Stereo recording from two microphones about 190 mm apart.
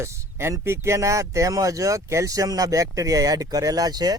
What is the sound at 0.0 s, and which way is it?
Speech, 15° right (ahead or behind).